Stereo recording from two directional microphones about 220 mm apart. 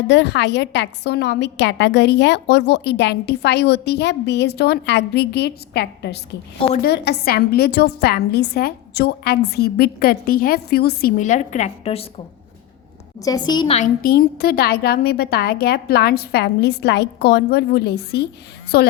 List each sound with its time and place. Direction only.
0.1 s a woman's voice: 50° left (ahead or behind)
11.2 s a woman's voice: 35° left (ahead or behind)
13.2 s a woman's voice: 20° left (ahead or behind)
13.7 s a woman's voice: 40° left (ahead or behind)